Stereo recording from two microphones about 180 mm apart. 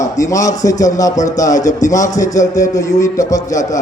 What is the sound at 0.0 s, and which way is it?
Speech, 20° left (ahead or behind).